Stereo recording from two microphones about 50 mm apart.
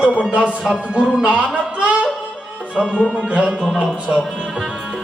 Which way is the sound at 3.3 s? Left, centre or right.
Right.